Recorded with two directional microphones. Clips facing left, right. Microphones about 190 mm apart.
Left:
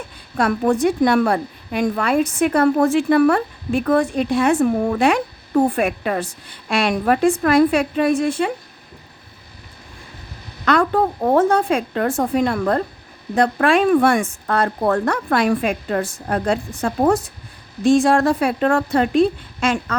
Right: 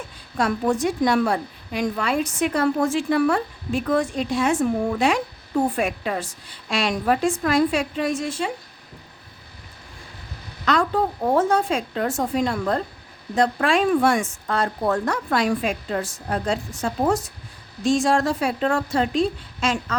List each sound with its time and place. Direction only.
0.3 s a woman's voice: 60° left (ahead or behind)
10.7 s a woman's voice: 55° left (ahead or behind)